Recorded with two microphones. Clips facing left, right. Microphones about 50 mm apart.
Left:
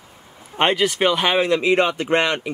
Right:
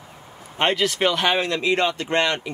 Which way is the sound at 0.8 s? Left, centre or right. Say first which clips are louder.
Left 2 dB; centre.